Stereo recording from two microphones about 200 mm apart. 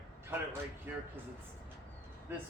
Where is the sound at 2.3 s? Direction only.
10° right (ahead or behind).